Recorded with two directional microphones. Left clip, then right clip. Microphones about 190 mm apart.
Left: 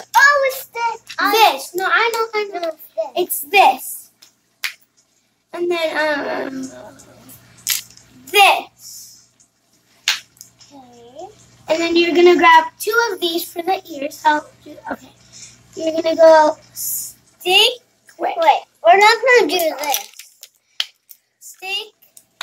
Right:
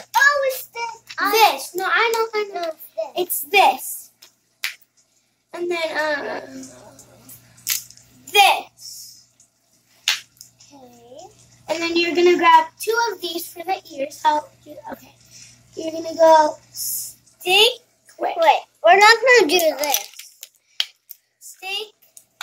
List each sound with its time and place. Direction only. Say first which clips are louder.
0.1 s child singing: left 4 dB; 15° right (ahead or behind)
1.3 s a child's voice: left 2 dB; 10° right (ahead or behind)
5.5 s a child's voice: left 4 dB; 5° right (ahead or behind)
8.3 s a woman's voice: left 3 dB; 10° right (ahead or behind)
10.4 s a sound: left 2 dB; 10° right (ahead or behind)
11.6 s a child's voice: left 5 dB; centre (ahead or behind)
15.8 s a child's voice: left 5 dB; 5° right (ahead or behind)
17.4 s a sound: left 2 dB; 5° right (ahead or behind)
18.4 s a child's voice: left 1 dB; 50° right (ahead or behind)
20.8 s a sound: left 1 dB; 15° right (ahead or behind)
21.5 s a child's voice: left 3 dB; 10° right (ahead or behind)